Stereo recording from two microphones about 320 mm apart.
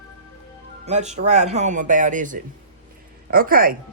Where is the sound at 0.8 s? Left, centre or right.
Right.